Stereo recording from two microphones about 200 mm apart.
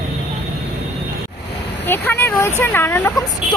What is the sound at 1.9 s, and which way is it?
A woman's voice, 10° left (ahead or behind).